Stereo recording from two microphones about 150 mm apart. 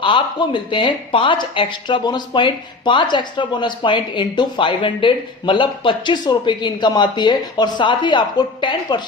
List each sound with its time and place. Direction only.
0.0 s speech: 30° left (ahead or behind)